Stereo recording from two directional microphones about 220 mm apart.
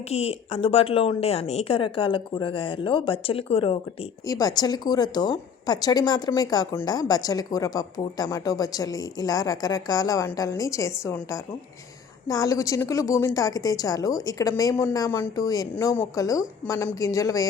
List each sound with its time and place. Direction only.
0.1 s a woman's voice: 25° left (ahead or behind)